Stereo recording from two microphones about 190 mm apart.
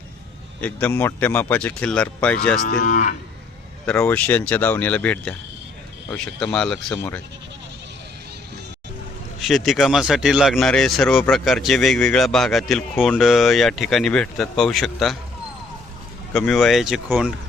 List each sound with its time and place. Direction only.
0.6 s speech: 10° left (ahead or behind)
2.6 s moo: 45° left (ahead or behind)
3.8 s speech: 10° left (ahead or behind)
9.4 s speech: centre (ahead or behind)
16.3 s speech: 5° left (ahead or behind)